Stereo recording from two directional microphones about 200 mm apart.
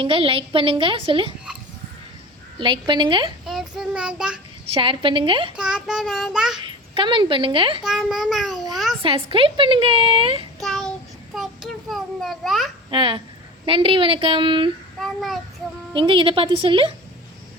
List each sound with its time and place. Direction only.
0.0 s a woman's voice: 25° right (ahead or behind)
2.6 s a woman's voice: 25° right (ahead or behind)
3.4 s child singing: centre (ahead or behind)
4.7 s a woman's voice: 25° right (ahead or behind)
5.5 s a child's voice: 5° right (ahead or behind)
6.7 s a woman's voice: 25° right (ahead or behind)
7.9 s a child's voice: 5° right (ahead or behind)
8.7 s a sound: centre (ahead or behind)
9.0 s a woman's voice: 25° right (ahead or behind)
10.6 s child singing: centre (ahead or behind)
11.3 s a child's voice: centre (ahead or behind)
12.9 s a woman's voice: 25° right (ahead or behind)
15.0 s a child's voice: centre (ahead or behind)
15.9 s a woman's voice: 25° right (ahead or behind)